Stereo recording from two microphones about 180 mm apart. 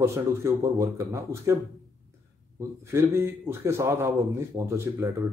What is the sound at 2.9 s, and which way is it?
Speech, 15° right (ahead or behind).